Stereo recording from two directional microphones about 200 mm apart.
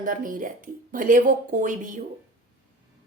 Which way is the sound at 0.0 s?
40° right (ahead or behind).